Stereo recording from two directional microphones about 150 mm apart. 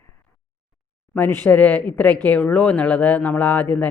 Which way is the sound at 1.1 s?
15° left (ahead or behind).